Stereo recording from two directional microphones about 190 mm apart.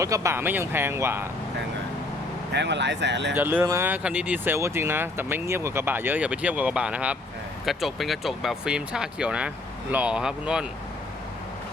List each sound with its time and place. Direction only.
0.0 s speech: 15° right (ahead or behind)
2.5 s speech: 65° right (ahead or behind)
3.3 s speech: 10° right (ahead or behind)